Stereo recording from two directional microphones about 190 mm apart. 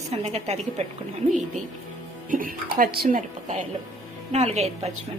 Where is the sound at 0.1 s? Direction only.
35° right (ahead or behind).